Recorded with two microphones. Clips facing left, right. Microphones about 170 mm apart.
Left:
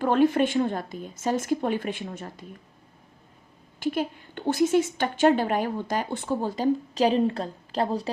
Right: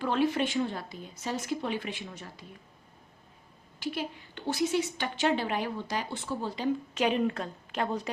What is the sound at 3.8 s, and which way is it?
A woman's voice, 50° left (ahead or behind).